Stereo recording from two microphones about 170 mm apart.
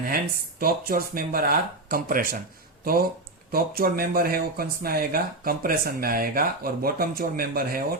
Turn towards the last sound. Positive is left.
turn(degrees=-60)  # may be behind; listen again after turning